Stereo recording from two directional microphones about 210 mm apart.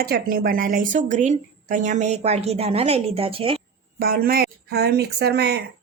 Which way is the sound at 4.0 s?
45° right (ahead or behind).